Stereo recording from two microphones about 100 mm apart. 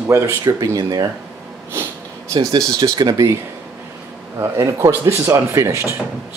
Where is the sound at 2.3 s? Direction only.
40° right (ahead or behind).